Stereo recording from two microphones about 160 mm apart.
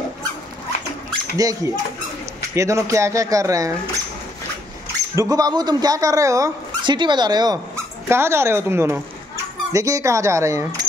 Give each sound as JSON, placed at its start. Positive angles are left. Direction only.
{"t": 1.3, "sound": "speech", "side_deg": -20}
{"t": 5.1, "sound": "speech", "side_deg": -20}